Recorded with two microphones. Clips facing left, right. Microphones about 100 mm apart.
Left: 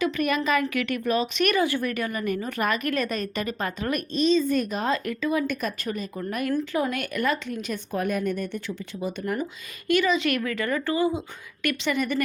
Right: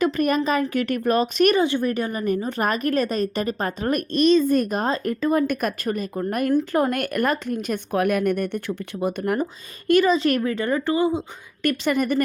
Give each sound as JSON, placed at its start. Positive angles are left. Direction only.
{"t": 0.0, "sound": "a woman's voice", "side_deg": -40}
{"t": 1.5, "sound": "a woman's voice", "side_deg": -25}
{"t": 4.1, "sound": "speech", "side_deg": -65}
{"t": 4.4, "sound": "speech", "side_deg": -45}
{"t": 7.9, "sound": "speech", "side_deg": -70}
{"t": 11.6, "sound": "speech", "side_deg": -40}